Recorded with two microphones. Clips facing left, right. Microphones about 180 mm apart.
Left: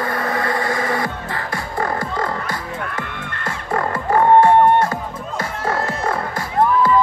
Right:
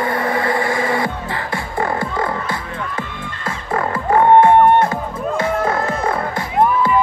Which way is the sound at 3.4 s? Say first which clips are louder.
Right 1 dB; 25° right (ahead or behind).